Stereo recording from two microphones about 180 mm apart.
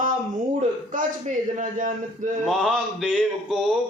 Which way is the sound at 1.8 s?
45° right (ahead or behind).